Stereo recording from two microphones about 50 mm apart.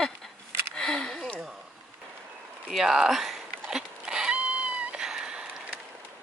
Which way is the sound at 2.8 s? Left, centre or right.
Centre.